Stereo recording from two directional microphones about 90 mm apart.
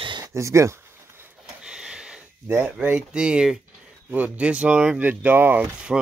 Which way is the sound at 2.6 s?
15° right (ahead or behind).